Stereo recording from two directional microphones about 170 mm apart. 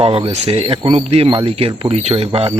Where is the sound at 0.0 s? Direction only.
35° right (ahead or behind).